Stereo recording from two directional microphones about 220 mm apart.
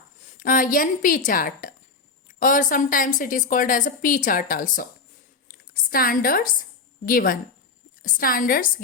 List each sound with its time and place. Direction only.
0.3 s a woman's voice: 40° left (ahead or behind)